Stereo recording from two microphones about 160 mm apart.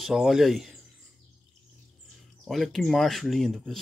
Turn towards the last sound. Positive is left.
turn(degrees=0)  # may be behind; listen again after turning